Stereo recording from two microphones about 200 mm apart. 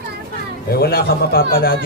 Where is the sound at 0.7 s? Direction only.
50° left (ahead or behind).